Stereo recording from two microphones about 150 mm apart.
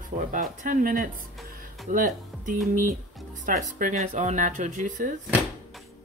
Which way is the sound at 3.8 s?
55° right (ahead or behind).